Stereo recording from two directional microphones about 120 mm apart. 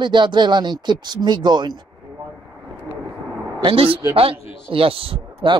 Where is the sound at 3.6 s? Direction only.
50° right (ahead or behind).